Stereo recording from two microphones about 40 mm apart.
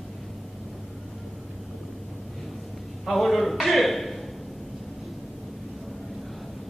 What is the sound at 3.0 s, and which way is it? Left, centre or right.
A man's voice, centre.